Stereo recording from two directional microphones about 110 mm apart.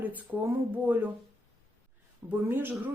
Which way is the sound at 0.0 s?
15° right (ahead or behind).